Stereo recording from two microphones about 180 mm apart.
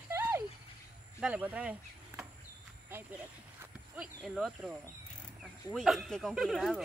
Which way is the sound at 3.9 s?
Centre (ahead or behind).